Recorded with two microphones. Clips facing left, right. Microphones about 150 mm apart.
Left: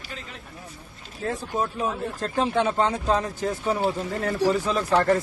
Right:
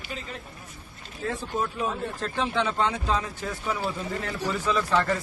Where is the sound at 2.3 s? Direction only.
45° left (ahead or behind).